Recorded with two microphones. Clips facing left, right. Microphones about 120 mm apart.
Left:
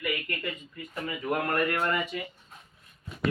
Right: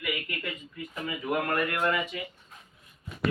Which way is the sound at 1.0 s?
5° right (ahead or behind).